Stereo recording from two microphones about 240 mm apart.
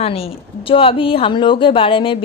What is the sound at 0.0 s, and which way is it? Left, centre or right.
Speech, left.